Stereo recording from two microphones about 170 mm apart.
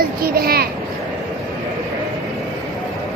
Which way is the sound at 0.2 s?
65° right (ahead or behind).